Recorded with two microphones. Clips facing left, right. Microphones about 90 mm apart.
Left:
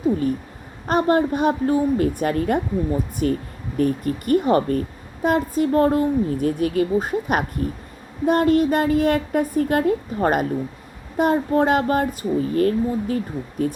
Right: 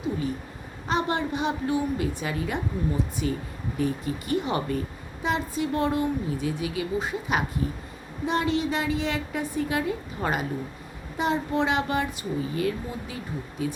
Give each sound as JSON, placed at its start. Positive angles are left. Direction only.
{"t": 0.9, "sound": "speech", "side_deg": 45}